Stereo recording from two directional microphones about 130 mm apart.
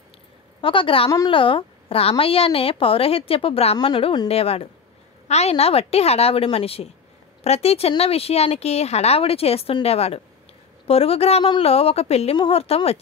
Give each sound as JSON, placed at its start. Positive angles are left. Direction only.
{"t": 0.6, "sound": "a woman's voice", "side_deg": 40}
{"t": 4.3, "sound": "a woman's voice", "side_deg": 50}